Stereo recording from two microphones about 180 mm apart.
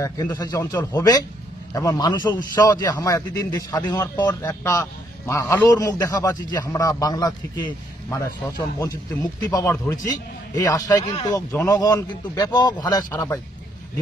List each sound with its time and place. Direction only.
0.0 s a man's voice: 25° left (ahead or behind)
8.7 s a man's voice: 20° left (ahead or behind)